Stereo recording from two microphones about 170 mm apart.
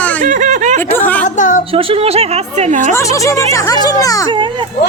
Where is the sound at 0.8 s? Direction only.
10° left (ahead or behind).